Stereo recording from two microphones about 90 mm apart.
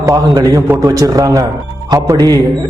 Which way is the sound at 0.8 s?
40° right (ahead or behind).